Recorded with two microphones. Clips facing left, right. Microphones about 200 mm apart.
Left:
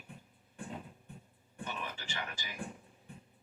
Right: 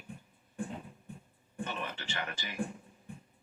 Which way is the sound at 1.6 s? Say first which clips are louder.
Right 1 dB; 65° right (ahead or behind).